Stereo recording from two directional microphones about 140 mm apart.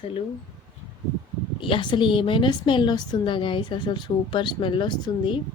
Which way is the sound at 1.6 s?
35° left (ahead or behind).